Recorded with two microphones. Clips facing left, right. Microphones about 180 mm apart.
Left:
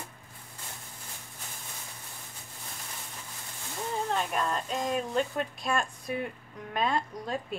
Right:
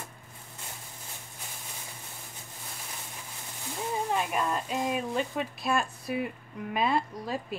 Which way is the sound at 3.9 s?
10° right (ahead or behind).